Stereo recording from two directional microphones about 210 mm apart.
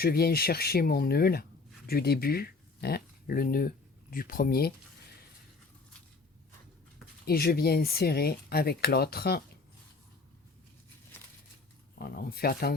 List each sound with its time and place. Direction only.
0.0 s speech: 45° left (ahead or behind)
7.3 s speech: 45° left (ahead or behind)
11.9 s speech: 45° left (ahead or behind)